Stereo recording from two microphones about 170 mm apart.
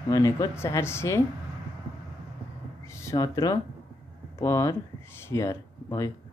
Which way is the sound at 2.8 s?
15° left (ahead or behind).